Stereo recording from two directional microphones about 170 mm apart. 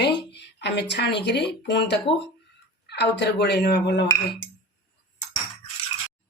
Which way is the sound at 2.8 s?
80° left.